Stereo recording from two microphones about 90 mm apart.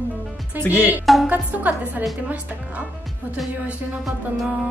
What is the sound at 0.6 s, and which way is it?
Speech, 20° right (ahead or behind).